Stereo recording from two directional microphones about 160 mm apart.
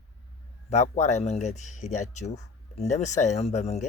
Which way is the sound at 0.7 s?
45° left (ahead or behind).